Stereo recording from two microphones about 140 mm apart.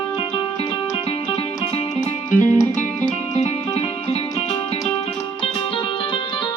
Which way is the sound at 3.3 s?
50° left (ahead or behind).